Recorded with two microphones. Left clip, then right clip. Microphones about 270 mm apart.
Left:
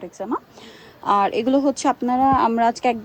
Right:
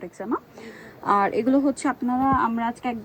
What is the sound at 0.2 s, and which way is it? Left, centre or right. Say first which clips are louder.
A woman's voice: left 2 dB; centre.